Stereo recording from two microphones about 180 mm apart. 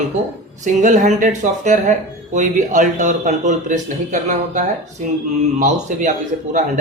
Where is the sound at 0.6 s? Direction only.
45° right (ahead or behind).